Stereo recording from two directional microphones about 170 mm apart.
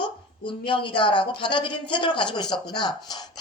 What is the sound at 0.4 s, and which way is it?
Speech, 30° left (ahead or behind).